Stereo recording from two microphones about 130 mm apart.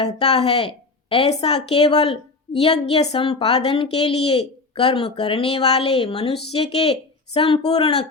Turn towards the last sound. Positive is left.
turn(degrees=50)  # may be behind; listen again after turning